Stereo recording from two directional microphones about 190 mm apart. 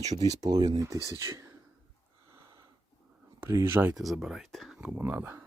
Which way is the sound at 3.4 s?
15° right (ahead or behind).